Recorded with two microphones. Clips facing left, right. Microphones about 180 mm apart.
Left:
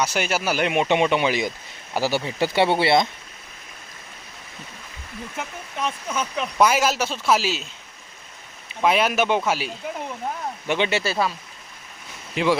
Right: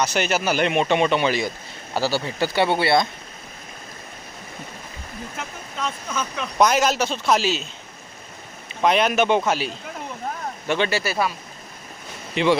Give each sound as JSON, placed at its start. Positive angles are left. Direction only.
{"t": 0.0, "sound": "speech", "side_deg": 5}
{"t": 5.8, "sound": "speech", "side_deg": 15}
{"t": 8.8, "sound": "speech", "side_deg": 5}
{"t": 10.7, "sound": "speech", "side_deg": 20}
{"t": 12.3, "sound": "speech", "side_deg": 5}